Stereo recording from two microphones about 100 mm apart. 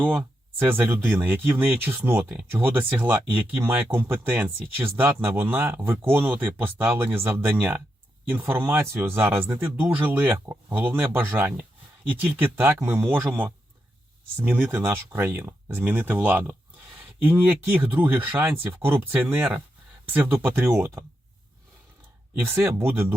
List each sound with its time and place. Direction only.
0.0 s speech: 15° right (ahead or behind)
22.4 s speech: 25° right (ahead or behind)